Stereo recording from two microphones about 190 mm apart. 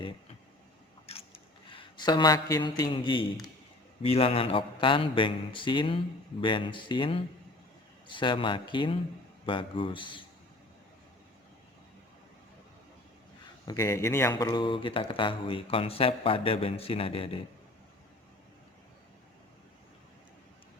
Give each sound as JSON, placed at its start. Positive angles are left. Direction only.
{"t": 1.0, "sound": "a sound", "side_deg": 30}
{"t": 4.0, "sound": "speech", "side_deg": 30}
{"t": 13.7, "sound": "speech", "side_deg": 15}